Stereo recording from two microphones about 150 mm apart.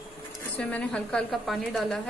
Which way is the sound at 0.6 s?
10° left (ahead or behind).